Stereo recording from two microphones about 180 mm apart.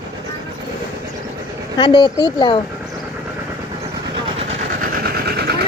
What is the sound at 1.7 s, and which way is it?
Speech, 25° left (ahead or behind).